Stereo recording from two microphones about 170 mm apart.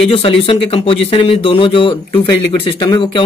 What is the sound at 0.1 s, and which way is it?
Speech, 35° left (ahead or behind).